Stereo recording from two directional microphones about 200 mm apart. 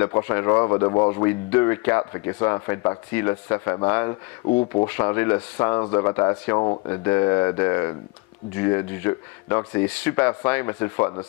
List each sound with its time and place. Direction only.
0.0 s speech: 15° left (ahead or behind)
4.5 s speech: 30° left (ahead or behind)
4.8 s speech: 10° left (ahead or behind)